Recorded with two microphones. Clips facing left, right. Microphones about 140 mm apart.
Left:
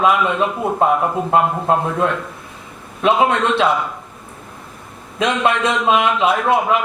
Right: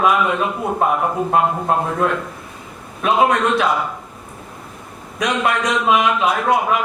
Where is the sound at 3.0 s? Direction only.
25° left (ahead or behind).